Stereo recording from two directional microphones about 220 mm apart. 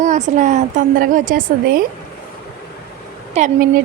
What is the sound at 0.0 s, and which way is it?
Speech, 35° right (ahead or behind).